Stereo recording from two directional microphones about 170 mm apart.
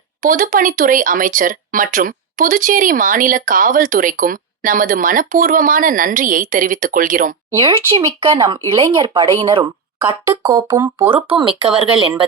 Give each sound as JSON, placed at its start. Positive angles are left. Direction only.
{"t": 0.2, "sound": "speech", "side_deg": -55}
{"t": 7.6, "sound": "speech", "side_deg": -30}
{"t": 10.5, "sound": "speech", "side_deg": -15}
{"t": 11.1, "sound": "speech", "side_deg": -30}